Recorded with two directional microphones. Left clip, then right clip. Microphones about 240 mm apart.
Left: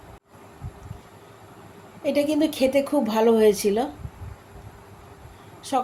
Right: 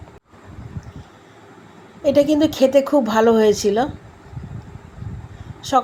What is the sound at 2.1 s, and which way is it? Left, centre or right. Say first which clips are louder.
Speech: right 7 dB; centre.